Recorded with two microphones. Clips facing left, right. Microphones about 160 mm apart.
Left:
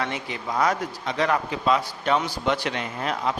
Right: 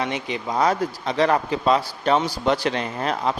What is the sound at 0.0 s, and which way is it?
Speech, 20° right (ahead or behind).